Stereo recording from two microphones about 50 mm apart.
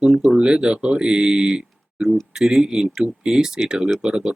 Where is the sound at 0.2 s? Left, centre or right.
Centre.